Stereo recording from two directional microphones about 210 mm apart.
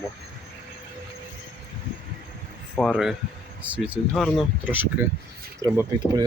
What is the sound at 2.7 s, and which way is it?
Speech, 5° left (ahead or behind).